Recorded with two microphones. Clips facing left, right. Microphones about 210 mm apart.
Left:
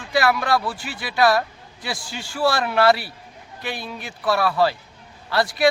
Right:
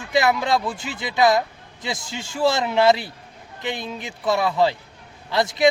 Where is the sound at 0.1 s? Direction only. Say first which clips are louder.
Even; 20° right (ahead or behind).